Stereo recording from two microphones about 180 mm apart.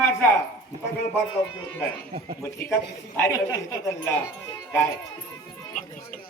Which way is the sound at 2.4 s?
15° left (ahead or behind).